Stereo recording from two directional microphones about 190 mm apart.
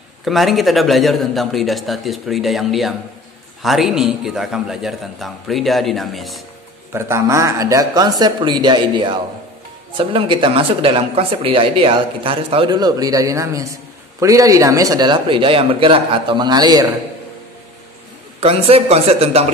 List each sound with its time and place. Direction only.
0.2 s a man's voice: centre (ahead or behind)
6.9 s speech: 15° right (ahead or behind)
18.4 s a man's voice: 30° right (ahead or behind)